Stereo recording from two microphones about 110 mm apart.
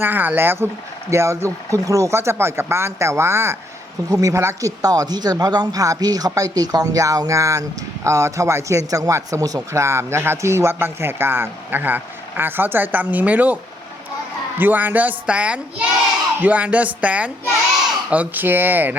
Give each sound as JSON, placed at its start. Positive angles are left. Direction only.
{"t": 0.0, "sound": "a man's voice", "side_deg": -15}
{"t": 14.6, "sound": "speech", "side_deg": -15}